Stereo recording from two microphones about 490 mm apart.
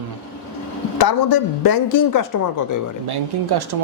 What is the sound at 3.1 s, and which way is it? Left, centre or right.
Speech, right.